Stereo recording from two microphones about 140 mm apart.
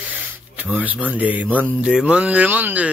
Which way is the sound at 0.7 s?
10° right (ahead or behind).